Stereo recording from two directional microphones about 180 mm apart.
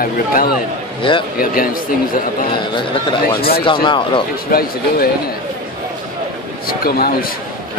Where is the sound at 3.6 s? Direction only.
25° left (ahead or behind).